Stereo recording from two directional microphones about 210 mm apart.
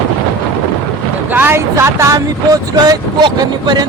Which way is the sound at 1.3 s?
10° right (ahead or behind).